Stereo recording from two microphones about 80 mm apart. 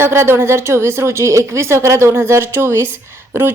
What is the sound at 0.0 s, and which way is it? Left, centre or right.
A woman's voice, right.